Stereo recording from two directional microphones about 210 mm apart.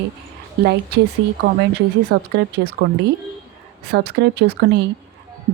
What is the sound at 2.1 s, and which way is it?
Speech, 55° right (ahead or behind).